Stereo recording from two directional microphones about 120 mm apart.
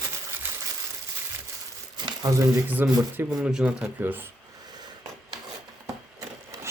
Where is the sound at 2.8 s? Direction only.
15° right (ahead or behind).